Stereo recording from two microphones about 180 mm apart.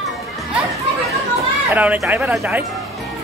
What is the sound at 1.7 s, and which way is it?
Speech, 10° right (ahead or behind).